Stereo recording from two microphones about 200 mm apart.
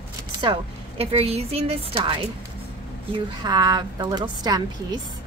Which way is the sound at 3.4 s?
20° right (ahead or behind).